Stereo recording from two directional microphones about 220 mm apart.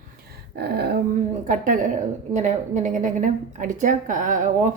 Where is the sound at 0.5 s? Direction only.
45° right (ahead or behind).